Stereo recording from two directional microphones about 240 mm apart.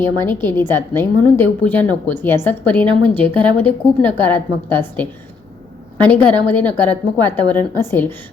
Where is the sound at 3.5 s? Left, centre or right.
Centre.